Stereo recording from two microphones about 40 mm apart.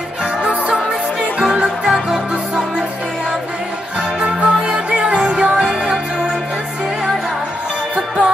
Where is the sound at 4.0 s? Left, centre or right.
Right.